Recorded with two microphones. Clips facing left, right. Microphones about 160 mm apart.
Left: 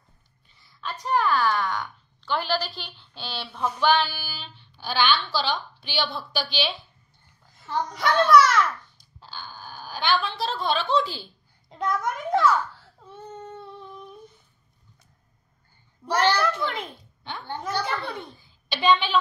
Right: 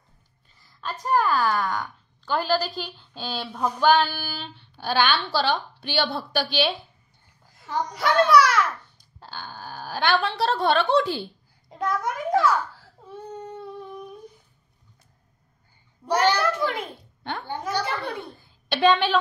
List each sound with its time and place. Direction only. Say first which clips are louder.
0.6 s a sound: right 2 dB; 40° right (ahead or behind)
1.3 s speech: right 1 dB; 40° right (ahead or behind)
3.2 s a sound: right 2 dB; 45° right (ahead or behind)
7.5 s a child's voice: even; 10° right (ahead or behind)
9.2 s speech: right 3 dB; 60° right (ahead or behind)
11.7 s a child's voice: even; 5° right (ahead or behind)
13.3 s a sound: right 3 dB; 10° right (ahead or behind)
16.2 s a child's voice: right 1 dB; 10° right (ahead or behind)
18.3 s a woman's voice: right 5 dB; 55° right (ahead or behind)